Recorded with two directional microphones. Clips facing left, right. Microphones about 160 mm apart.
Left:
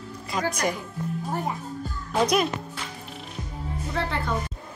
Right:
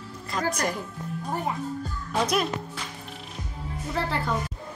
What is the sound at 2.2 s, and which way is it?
Speech, centre (ahead or behind).